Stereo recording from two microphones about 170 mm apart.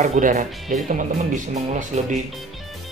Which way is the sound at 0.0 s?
45° right (ahead or behind).